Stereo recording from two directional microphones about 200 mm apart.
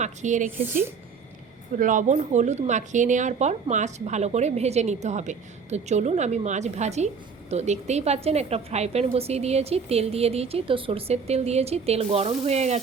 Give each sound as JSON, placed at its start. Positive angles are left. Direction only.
{"t": 0.0, "sound": "speech", "side_deg": -35}
{"t": 1.8, "sound": "speech", "side_deg": -40}